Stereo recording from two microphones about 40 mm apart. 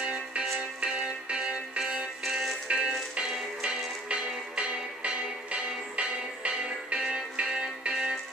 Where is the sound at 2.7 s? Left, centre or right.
Right.